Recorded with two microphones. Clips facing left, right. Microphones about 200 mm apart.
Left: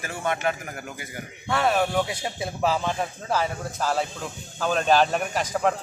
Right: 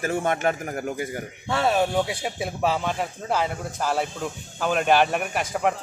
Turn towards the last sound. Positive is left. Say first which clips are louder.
# even
turn(degrees=-15)  # may be behind; listen again after turning